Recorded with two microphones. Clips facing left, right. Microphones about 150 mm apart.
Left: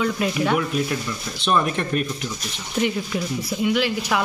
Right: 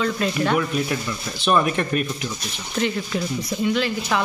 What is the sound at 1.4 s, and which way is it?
Speech, 5° right (ahead or behind).